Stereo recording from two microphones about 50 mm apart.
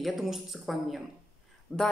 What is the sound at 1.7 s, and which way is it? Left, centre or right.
Speech, centre.